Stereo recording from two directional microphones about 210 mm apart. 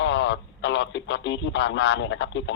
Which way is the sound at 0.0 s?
60° left (ahead or behind).